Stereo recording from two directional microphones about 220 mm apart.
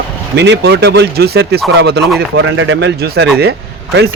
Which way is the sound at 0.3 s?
50° right (ahead or behind).